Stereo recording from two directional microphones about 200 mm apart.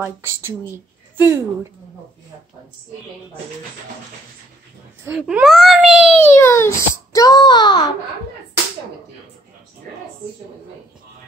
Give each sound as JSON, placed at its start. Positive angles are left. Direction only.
{"t": 0.0, "sound": "speech", "side_deg": -10}
{"t": 5.0, "sound": "speech", "side_deg": -5}
{"t": 6.2, "sound": "a child's voice", "side_deg": 10}